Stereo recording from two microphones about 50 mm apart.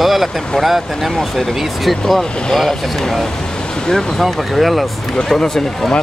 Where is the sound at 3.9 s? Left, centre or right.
Centre.